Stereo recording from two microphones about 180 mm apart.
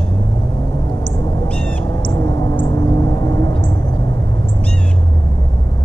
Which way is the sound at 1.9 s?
20° left (ahead or behind).